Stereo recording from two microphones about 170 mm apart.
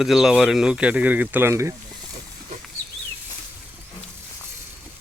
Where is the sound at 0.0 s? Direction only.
5° right (ahead or behind).